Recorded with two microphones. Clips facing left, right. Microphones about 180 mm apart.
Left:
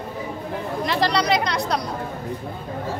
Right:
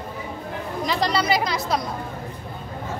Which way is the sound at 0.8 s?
Centre (ahead or behind).